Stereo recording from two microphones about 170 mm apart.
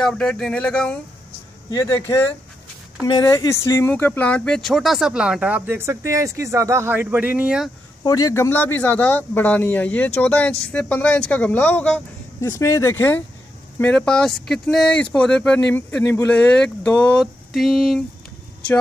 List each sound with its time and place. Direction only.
0.0 s speech: 5° left (ahead or behind)
1.7 s speech: 20° left (ahead or behind); by 7.7 s 5° right (ahead or behind)
8.0 s speech: 20° left (ahead or behind); by 18.0 s centre (ahead or behind)